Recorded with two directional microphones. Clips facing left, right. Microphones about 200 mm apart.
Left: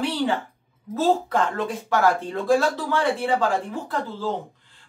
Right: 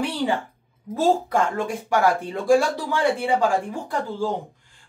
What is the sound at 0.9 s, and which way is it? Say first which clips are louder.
A woman's voice: right 1 dB; 10° right (ahead or behind).